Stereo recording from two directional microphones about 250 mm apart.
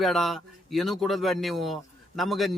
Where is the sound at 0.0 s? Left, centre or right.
Centre.